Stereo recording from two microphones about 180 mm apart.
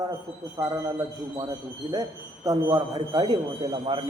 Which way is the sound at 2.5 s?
20° right (ahead or behind).